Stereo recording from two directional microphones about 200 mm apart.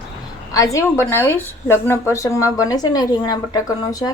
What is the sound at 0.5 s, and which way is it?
A woman's voice, 15° left (ahead or behind).